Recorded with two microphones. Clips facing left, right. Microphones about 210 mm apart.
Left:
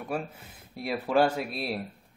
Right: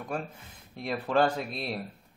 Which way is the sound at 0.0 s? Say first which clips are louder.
Left 2 dB; 5° left (ahead or behind).